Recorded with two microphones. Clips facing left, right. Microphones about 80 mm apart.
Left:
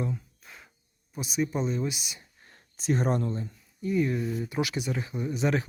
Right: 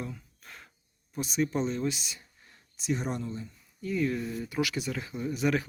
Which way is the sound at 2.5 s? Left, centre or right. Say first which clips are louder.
Left 3 dB; left.